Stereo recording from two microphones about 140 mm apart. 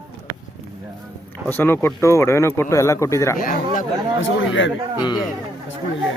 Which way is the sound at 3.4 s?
80° left.